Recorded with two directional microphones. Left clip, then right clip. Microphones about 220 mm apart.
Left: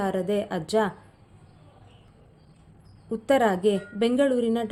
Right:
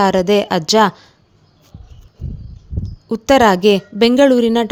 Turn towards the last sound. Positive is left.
turn(degrees=-40)  # may be behind; listen again after turning